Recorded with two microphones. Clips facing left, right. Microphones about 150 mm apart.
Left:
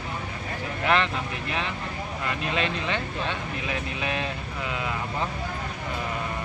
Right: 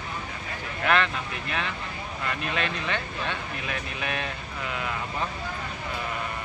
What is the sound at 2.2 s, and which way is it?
Speech, 25° left (ahead or behind).